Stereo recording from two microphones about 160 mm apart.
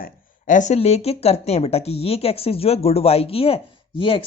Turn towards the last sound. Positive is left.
turn(degrees=35)  # may be behind; listen again after turning